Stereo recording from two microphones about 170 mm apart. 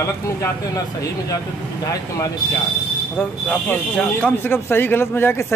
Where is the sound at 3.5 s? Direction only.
5° left (ahead or behind).